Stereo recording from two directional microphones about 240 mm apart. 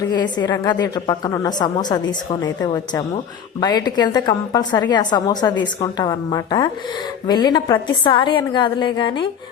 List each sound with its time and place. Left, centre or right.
0.1 s a woman's voice: centre